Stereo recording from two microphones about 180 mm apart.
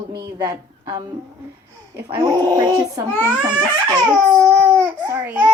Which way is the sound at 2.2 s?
20° right (ahead or behind).